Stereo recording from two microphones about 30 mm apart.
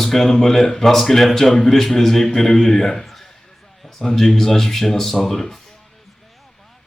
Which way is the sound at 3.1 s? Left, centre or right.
Centre.